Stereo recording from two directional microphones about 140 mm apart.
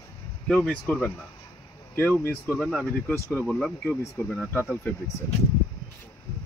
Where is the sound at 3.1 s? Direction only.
20° left (ahead or behind).